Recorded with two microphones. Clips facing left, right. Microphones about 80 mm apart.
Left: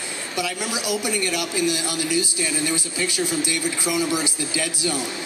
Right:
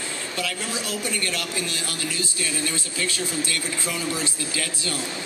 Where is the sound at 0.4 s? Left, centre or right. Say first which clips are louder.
Left 4 dB; centre.